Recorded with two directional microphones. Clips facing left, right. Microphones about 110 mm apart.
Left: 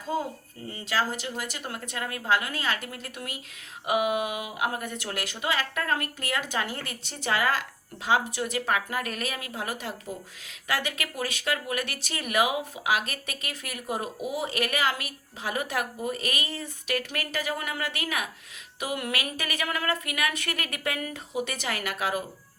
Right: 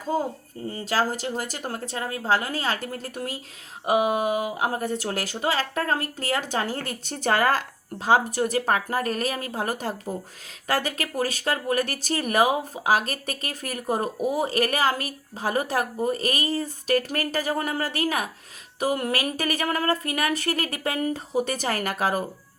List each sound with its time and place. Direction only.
0.1 s speech: 40° right (ahead or behind)